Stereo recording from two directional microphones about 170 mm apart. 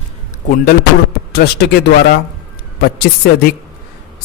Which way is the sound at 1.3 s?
70° left (ahead or behind).